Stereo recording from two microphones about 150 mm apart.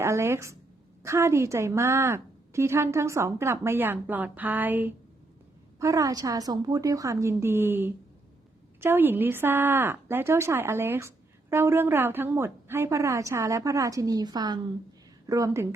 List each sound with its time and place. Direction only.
0.0 s a woman's voice: 15° right (ahead or behind)